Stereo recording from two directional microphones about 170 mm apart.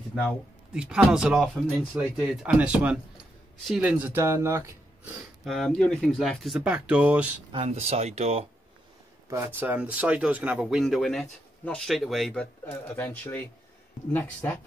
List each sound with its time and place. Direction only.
0.1 s speech: centre (ahead or behind); by 5.1 s 15° right (ahead or behind)
5.4 s speech: centre (ahead or behind)
7.5 s speech: 40° right (ahead or behind)
9.3 s speech: 15° right (ahead or behind); by 14.6 s 10° left (ahead or behind)